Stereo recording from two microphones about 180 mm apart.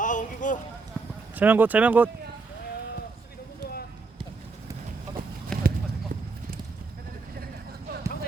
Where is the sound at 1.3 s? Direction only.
10° right (ahead or behind).